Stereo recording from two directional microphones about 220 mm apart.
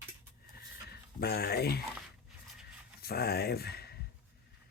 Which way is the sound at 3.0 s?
45° left (ahead or behind).